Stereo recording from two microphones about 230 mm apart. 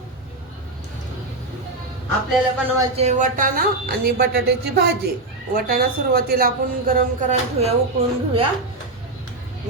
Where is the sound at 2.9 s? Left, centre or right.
Right.